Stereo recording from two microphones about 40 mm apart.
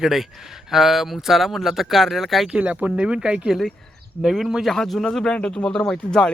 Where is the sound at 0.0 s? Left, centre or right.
Centre.